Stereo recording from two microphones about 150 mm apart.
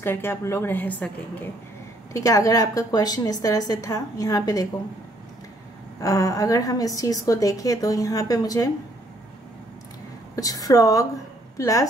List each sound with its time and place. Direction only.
0.0 s a woman's voice: 15° left (ahead or behind)
2.1 s a woman's voice: 20° left (ahead or behind)
5.9 s a woman's voice: 20° left (ahead or behind)
10.3 s a woman's voice: 25° left (ahead or behind)